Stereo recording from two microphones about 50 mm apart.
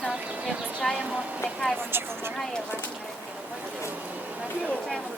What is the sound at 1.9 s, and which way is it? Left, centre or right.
Speech, right.